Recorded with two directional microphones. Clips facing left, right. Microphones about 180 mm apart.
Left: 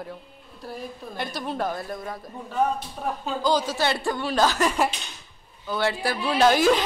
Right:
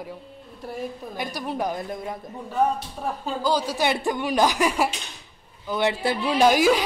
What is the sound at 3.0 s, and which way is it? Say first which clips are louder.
A woman's voice: even; 10° right (ahead or behind).